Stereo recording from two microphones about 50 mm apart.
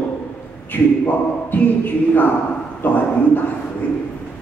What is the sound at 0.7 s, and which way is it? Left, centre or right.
Speech, left.